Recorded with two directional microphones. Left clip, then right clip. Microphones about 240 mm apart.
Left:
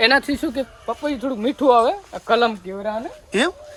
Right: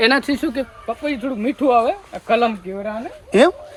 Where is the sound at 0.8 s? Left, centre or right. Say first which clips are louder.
Even; centre.